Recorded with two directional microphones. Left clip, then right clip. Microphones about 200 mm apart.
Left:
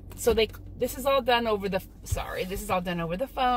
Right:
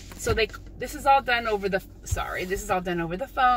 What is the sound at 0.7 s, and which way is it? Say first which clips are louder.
Speech: right 4 dB; 20° right (ahead or behind).